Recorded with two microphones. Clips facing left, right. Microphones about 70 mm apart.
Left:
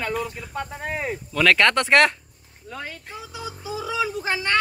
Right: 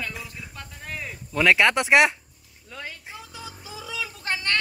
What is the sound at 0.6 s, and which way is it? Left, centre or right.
Speech, left.